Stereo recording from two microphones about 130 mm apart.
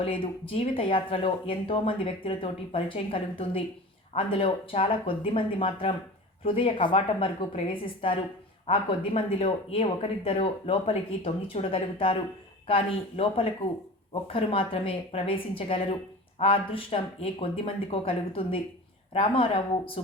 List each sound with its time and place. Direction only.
0.0 s speech: 45° left (ahead or behind)